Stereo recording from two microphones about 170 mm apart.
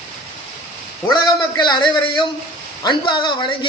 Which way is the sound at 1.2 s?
25° left (ahead or behind).